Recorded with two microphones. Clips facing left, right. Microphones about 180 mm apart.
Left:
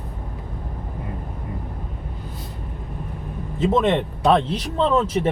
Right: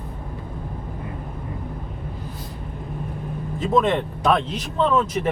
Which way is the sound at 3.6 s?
25° left (ahead or behind).